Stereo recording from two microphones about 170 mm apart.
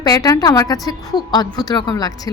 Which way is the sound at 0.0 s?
20° left (ahead or behind).